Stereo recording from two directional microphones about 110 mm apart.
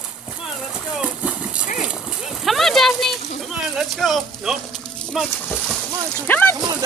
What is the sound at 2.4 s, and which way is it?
Speech, centre (ahead or behind).